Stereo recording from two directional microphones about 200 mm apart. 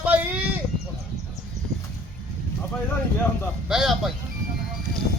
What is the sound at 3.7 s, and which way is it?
Speech, centre (ahead or behind).